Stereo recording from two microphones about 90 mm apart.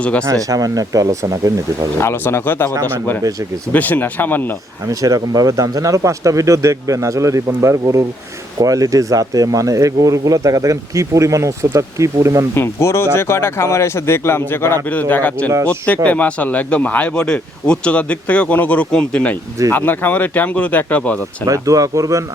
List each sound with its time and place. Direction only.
0.0 s speech: 15° left (ahead or behind)
0.4 s speech: 40° right (ahead or behind)
2.0 s speech: 30° left (ahead or behind)
3.7 s speech: 20° left (ahead or behind)
4.9 s speech: 40° right (ahead or behind)
12.5 s speech: 30° left (ahead or behind)
21.4 s speech: 40° right (ahead or behind)